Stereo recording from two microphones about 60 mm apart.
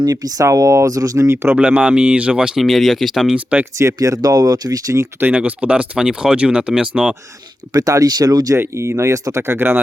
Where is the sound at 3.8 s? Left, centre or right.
Right.